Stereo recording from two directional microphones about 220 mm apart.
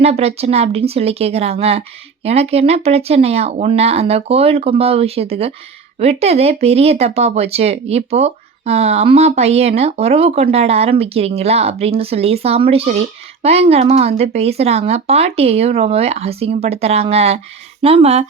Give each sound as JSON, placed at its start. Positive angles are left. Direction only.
{"t": 0.0, "sound": "speech", "side_deg": -30}